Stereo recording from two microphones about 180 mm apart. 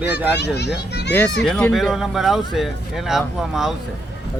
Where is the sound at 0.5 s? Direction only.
70° left (ahead or behind).